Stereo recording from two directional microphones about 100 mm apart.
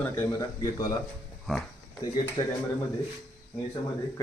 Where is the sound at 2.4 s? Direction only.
40° left (ahead or behind).